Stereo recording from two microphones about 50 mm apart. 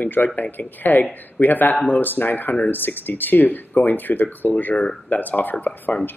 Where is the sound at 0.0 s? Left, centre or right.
Left.